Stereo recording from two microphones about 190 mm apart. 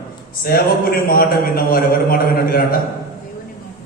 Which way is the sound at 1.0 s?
50° left (ahead or behind).